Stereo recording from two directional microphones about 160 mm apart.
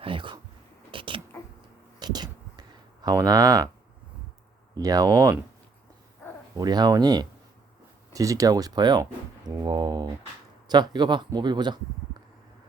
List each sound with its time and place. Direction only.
0.0 s speech: 30° right (ahead or behind)
0.9 s a sound: 30° right (ahead or behind)
4.7 s speech: 25° right (ahead or behind)
6.6 s speech: 25° right (ahead or behind)